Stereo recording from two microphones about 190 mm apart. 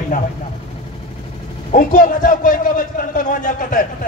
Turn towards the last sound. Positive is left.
turn(degrees=45)  # may be behind; listen again after turning